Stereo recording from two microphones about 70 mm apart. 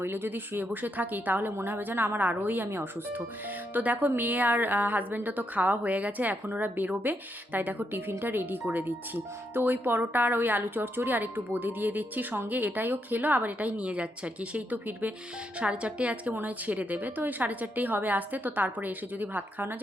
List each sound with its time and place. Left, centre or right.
0.0 s speech: right
9.6 s a woman's voice: right